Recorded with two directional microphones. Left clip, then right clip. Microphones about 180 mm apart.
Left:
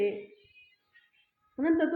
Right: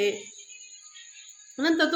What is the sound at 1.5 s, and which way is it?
Speech, 30° right (ahead or behind).